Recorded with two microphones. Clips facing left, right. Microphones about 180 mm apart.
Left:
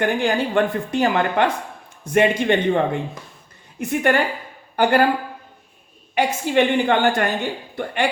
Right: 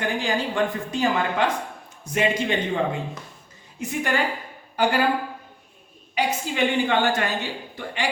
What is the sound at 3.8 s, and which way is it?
Speech, 60° left (ahead or behind).